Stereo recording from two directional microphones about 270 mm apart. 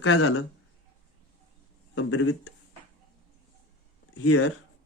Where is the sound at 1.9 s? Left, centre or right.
Left.